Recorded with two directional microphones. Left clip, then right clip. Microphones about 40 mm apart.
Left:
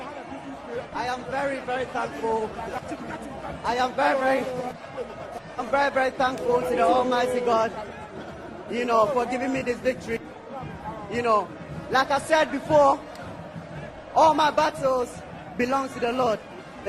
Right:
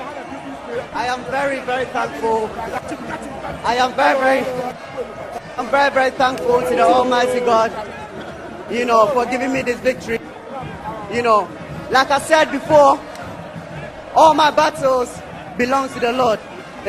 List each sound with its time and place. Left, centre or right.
0.7 s a man's voice: right
14.1 s a man's voice: centre